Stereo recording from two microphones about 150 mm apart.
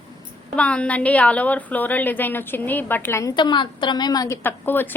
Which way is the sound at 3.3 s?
30° left (ahead or behind).